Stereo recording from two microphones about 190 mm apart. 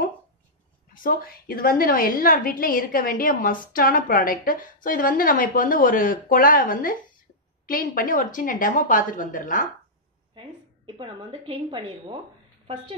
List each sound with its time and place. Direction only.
0.9 s a woman's voice: 50° left (ahead or behind)
10.4 s a woman's voice: 25° right (ahead or behind)